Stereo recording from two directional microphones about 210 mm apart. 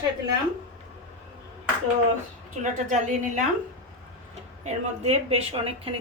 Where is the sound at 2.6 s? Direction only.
35° right (ahead or behind).